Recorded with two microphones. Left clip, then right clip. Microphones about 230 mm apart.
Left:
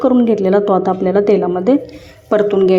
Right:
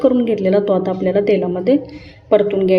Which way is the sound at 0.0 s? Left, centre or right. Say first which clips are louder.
Left 2 dB; centre.